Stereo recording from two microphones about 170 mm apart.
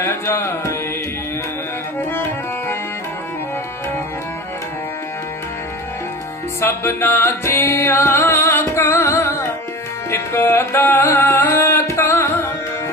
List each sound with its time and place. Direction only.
0.0 s music: 15° left (ahead or behind)
2.0 s tabla: 15° left (ahead or behind)
6.6 s music: 15° left (ahead or behind)